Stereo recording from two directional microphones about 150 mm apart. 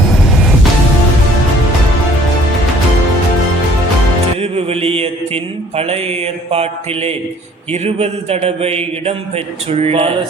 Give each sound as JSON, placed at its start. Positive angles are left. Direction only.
{"t": 0.1, "sound": "music", "side_deg": 0}
{"t": 4.4, "sound": "mantra", "side_deg": -40}
{"t": 7.7, "sound": "a man's voice", "side_deg": -45}